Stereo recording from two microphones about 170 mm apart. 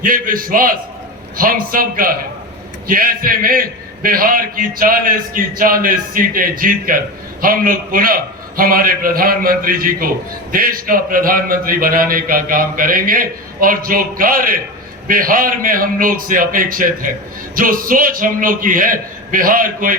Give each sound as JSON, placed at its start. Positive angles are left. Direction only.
{"t": 0.0, "sound": "a man's voice", "side_deg": -55}